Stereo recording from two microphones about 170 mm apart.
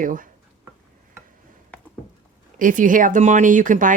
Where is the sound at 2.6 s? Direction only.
50° right (ahead or behind).